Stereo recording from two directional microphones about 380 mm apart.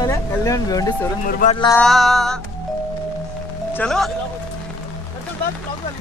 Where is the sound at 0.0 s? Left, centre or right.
Centre.